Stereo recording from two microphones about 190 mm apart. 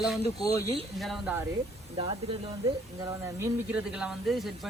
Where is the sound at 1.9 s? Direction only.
25° right (ahead or behind).